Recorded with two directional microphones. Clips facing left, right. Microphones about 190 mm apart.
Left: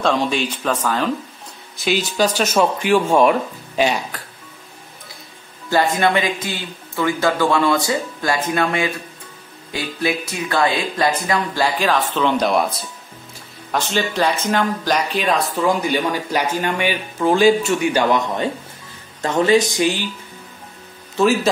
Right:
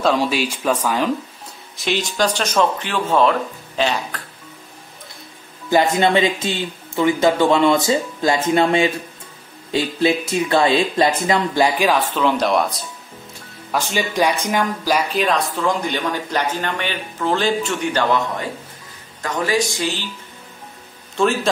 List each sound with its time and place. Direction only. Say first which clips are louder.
0.0 s speech: right 1 dB; 5° right (ahead or behind)
1.8 s speech: left 2 dB; 5° left (ahead or behind)
5.7 s speech: right 1 dB; 20° right (ahead or behind); by 12.8 s centre (ahead or behind)
13.7 s speech: left 1 dB; 10° right (ahead or behind)
15.0 s speech: even; centre (ahead or behind)
19.2 s speech: left 5 dB; 25° left (ahead or behind)